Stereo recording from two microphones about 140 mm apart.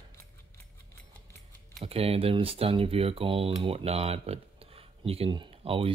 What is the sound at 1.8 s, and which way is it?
Speech, 45° right (ahead or behind).